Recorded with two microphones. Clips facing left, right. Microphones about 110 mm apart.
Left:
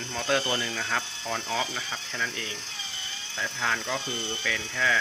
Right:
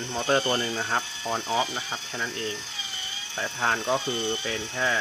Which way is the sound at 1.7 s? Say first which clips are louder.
Right 1 dB; 30° right (ahead or behind).